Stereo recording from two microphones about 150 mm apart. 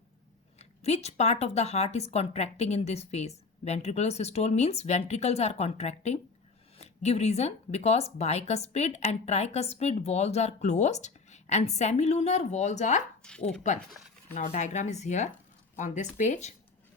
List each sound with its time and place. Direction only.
0.6 s speech: 45° left (ahead or behind)
13.2 s speech: 5° left (ahead or behind)
14.3 s speech: 55° left (ahead or behind)